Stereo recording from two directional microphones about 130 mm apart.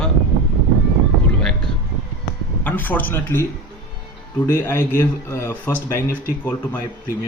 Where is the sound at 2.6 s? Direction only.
15° left (ahead or behind).